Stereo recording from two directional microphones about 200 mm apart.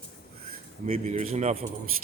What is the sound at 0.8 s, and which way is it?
Speech, 35° right (ahead or behind).